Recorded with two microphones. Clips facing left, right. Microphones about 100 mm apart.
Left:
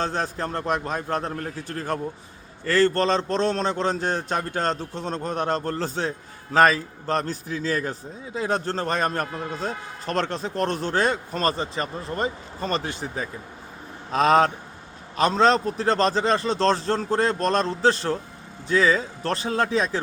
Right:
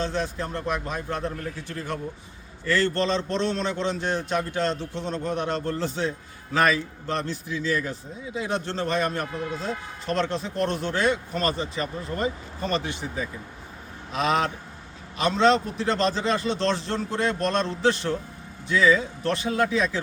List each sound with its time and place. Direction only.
0.0 s a man's voice: 40° left (ahead or behind)